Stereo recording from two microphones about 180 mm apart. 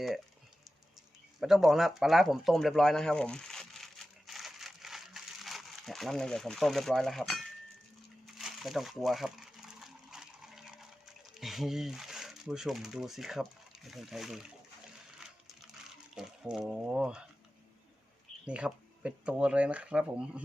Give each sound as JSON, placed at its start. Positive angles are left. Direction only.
{"t": 1.4, "sound": "a sound", "side_deg": 0}
{"t": 11.3, "sound": "speech", "side_deg": 0}
{"t": 16.1, "sound": "speech", "side_deg": -5}
{"t": 18.4, "sound": "speech", "side_deg": -5}